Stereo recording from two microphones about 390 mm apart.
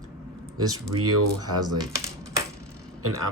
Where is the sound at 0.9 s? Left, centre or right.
Right.